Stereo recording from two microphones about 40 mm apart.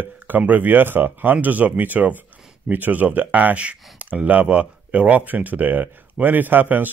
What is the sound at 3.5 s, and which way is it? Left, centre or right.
Speech, right.